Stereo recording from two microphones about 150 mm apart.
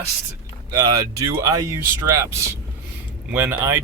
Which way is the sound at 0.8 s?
25° right (ahead or behind).